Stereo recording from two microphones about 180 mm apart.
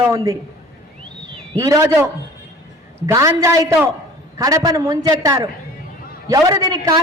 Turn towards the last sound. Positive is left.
turn(degrees=-20)  # may be behind; listen again after turning